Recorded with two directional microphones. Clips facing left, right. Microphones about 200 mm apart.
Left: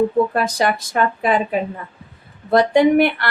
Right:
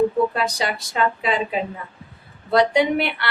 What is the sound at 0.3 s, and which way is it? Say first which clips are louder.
Speech: left 5 dB; 50° left (ahead or behind).